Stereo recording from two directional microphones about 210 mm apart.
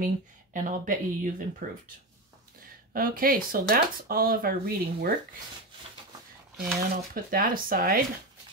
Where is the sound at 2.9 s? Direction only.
45° right (ahead or behind).